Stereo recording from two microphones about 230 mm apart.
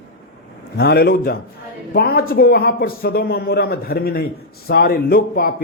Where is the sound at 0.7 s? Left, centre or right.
Left.